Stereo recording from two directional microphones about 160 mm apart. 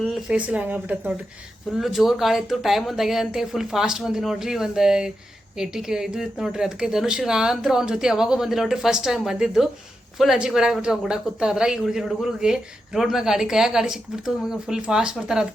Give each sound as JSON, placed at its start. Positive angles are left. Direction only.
{"t": 0.0, "sound": "speech", "side_deg": -5}